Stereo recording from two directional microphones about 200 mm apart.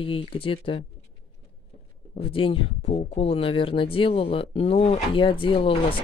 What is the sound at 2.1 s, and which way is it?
Speech, 30° left (ahead or behind).